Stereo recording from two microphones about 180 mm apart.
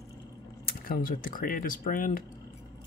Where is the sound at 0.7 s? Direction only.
55° left (ahead or behind).